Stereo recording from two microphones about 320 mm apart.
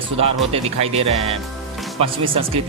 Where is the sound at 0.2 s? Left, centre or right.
Centre.